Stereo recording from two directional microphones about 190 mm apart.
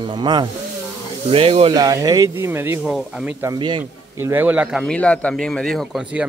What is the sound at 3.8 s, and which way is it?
Speech, 10° right (ahead or behind).